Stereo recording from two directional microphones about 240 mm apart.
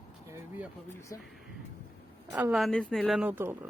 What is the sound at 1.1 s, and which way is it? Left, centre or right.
Speech, centre.